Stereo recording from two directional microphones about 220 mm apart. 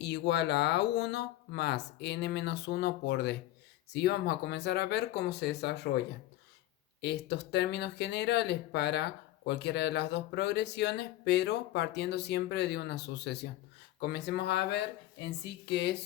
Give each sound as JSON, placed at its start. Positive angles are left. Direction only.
{"t": 0.0, "sound": "speech", "side_deg": 50}
{"t": 7.0, "sound": "speech", "side_deg": 50}